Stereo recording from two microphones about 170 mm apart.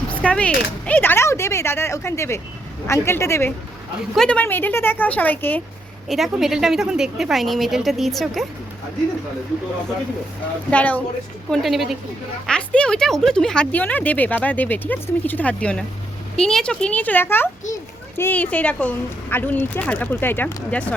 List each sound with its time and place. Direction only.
0.2 s dog: 5° left (ahead or behind)
0.9 s speech: 10° left (ahead or behind)
4.1 s speech: 5° left (ahead or behind)
6.1 s a woman's voice: centre (ahead or behind)
10.7 s a woman's voice: 10° left (ahead or behind)